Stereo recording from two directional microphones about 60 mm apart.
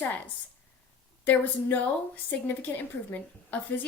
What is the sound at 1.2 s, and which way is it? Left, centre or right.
A woman's voice, left.